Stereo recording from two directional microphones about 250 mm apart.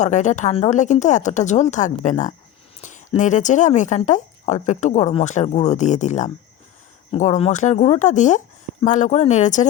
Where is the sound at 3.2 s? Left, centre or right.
Left.